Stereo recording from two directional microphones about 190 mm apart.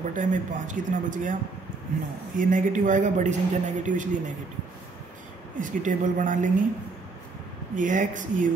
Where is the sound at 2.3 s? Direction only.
45° right (ahead or behind).